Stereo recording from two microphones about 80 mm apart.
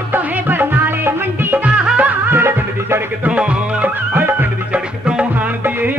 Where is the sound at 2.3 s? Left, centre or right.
Right.